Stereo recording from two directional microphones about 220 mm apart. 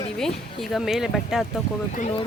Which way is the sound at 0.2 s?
Centre (ahead or behind).